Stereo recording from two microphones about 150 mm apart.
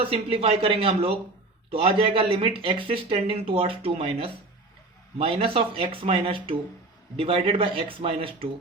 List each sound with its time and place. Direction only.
0.0 s speech: 40° right (ahead or behind)